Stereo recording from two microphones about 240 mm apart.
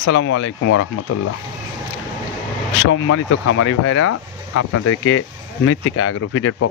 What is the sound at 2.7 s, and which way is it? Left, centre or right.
Speech, left.